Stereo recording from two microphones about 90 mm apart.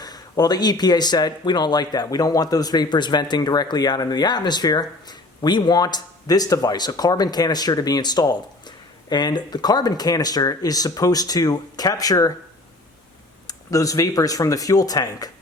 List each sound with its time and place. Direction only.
0.0 s speech: 50° left (ahead or behind)
13.5 s speech: 40° left (ahead or behind)